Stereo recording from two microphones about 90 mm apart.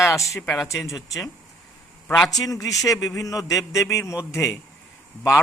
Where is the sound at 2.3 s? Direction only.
40° left (ahead or behind).